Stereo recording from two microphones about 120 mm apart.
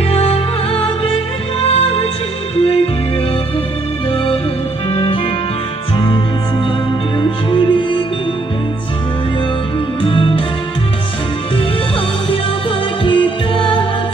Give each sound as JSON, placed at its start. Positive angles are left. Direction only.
{"t": 0.1, "sound": "music", "side_deg": 55}
{"t": 7.2, "sound": "music", "side_deg": 45}
{"t": 10.0, "sound": "music", "side_deg": 45}
{"t": 13.0, "sound": "music", "side_deg": 45}